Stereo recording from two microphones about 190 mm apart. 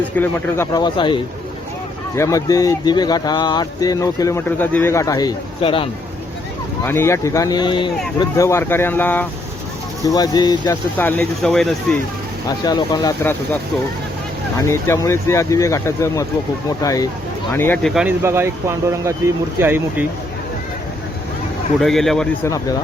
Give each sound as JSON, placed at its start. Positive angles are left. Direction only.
{"t": 0.2, "sound": "speech", "side_deg": 15}
{"t": 6.8, "sound": "speech", "side_deg": 15}
{"t": 10.9, "sound": "speech", "side_deg": 5}
{"t": 12.5, "sound": "speech", "side_deg": 20}
{"t": 14.7, "sound": "speech", "side_deg": 15}
{"t": 17.8, "sound": "speech", "side_deg": 0}
{"t": 18.2, "sound": "speech", "side_deg": -15}
{"t": 21.8, "sound": "speech", "side_deg": 0}
{"t": 22.4, "sound": "speech", "side_deg": 20}